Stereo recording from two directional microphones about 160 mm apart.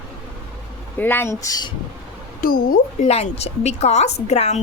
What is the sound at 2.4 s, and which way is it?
Speech, 65° left (ahead or behind).